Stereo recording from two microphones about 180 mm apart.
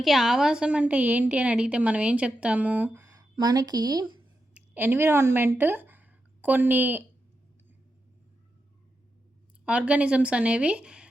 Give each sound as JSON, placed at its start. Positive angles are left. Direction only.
{"t": 0.0, "sound": "a woman's voice", "side_deg": 0}
{"t": 4.5, "sound": "speech", "side_deg": -10}
{"t": 9.6, "sound": "a woman's voice", "side_deg": -5}